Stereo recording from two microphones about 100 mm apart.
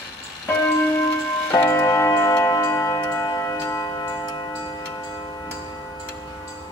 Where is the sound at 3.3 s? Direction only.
25° left (ahead or behind).